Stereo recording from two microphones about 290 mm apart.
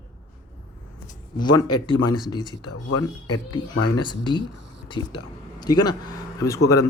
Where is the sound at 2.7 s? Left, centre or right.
Left.